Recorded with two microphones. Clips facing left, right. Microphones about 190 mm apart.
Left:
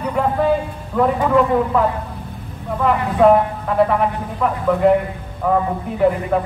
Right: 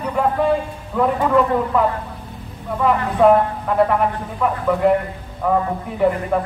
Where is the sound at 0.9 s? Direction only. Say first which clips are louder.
Left 1 dB; centre (ahead or behind).